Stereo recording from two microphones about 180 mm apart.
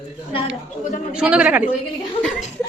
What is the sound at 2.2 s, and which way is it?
Speech, 5° left (ahead or behind).